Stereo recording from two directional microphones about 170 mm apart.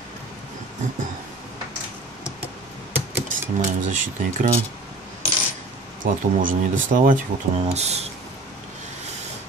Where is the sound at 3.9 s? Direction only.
50° right (ahead or behind).